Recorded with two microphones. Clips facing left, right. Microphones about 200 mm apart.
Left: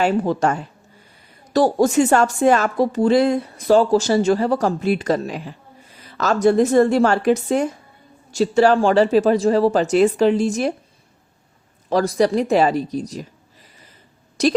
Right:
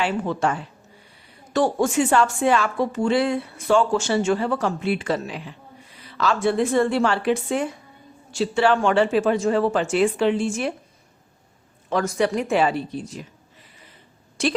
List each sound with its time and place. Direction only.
0.0 s speech: 35° left (ahead or behind)
11.9 s speech: 35° left (ahead or behind)
14.4 s speech: 40° left (ahead or behind)